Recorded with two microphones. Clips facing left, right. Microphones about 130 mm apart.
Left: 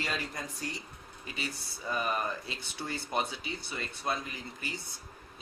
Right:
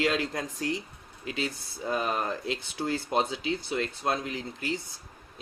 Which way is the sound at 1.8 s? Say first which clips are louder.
Right 4 dB; 90° right.